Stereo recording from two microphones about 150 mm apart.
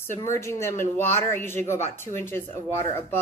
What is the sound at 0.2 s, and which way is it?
A woman's voice, 20° left (ahead or behind).